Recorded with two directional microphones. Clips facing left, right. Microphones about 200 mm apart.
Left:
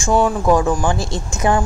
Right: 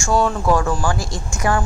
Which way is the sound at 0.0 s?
15° left (ahead or behind).